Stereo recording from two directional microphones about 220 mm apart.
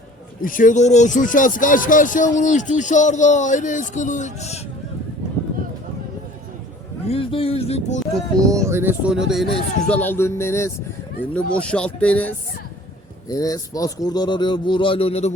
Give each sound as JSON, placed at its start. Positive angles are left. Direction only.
{"t": 0.4, "sound": "speech", "side_deg": 40}
{"t": 7.1, "sound": "speech", "side_deg": 25}
{"t": 8.4, "sound": "speech", "side_deg": -15}